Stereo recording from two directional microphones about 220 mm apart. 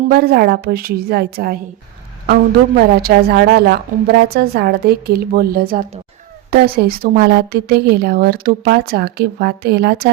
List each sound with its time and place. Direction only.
0.1 s a woman's voice: 45° right (ahead or behind)
2.7 s a woman's voice: 45° right (ahead or behind)